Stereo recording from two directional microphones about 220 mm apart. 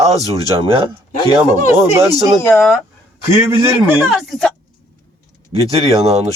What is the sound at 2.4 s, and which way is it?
Speech, 5° left (ahead or behind).